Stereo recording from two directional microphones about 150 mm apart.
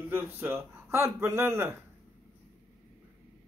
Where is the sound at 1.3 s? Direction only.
15° right (ahead or behind).